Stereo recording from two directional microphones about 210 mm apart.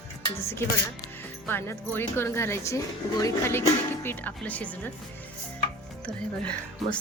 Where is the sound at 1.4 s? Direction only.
10° left (ahead or behind).